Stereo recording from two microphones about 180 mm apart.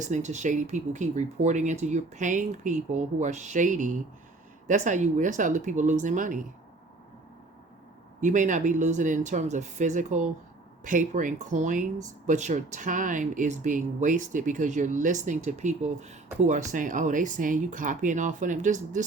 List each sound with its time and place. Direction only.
0.0 s speech: 40° right (ahead or behind)
8.2 s speech: 45° right (ahead or behind)